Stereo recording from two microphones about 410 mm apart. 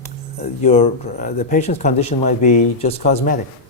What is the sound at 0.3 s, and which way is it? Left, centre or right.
Speech, centre.